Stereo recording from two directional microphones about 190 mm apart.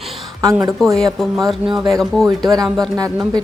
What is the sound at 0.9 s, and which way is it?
Speech, centre (ahead or behind).